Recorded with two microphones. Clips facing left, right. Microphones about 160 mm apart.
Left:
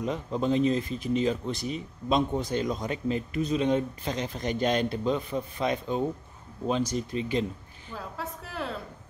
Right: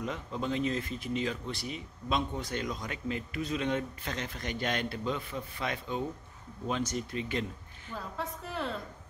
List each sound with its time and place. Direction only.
0.0 s speech: 25° left (ahead or behind)
8.2 s a woman's voice: 5° left (ahead or behind)